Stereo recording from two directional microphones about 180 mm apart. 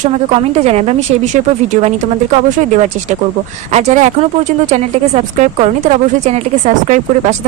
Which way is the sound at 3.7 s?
40° right (ahead or behind).